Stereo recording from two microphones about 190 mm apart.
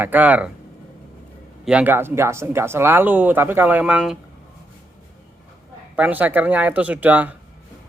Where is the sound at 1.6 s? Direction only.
10° right (ahead or behind).